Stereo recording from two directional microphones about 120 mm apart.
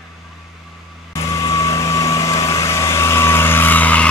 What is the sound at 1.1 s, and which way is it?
Vehicle, 25° left (ahead or behind).